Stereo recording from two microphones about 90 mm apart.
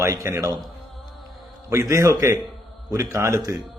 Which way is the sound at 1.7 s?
35° right (ahead or behind).